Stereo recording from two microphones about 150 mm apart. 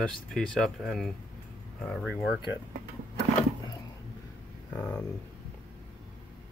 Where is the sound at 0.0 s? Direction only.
Centre (ahead or behind).